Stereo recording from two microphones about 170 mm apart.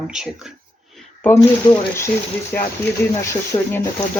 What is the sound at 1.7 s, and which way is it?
Speech, 15° left (ahead or behind).